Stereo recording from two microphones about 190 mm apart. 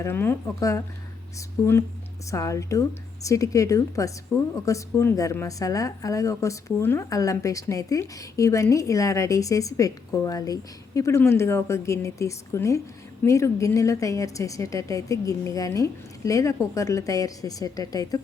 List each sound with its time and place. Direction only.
0.0 s a woman's voice: 10° left (ahead or behind)